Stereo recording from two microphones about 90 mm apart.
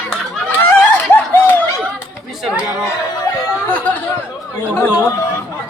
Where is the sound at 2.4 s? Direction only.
10° right (ahead or behind).